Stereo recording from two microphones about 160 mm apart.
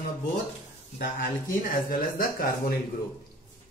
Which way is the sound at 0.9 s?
60° left (ahead or behind).